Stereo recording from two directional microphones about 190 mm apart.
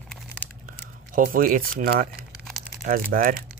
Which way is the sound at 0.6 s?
45° right (ahead or behind).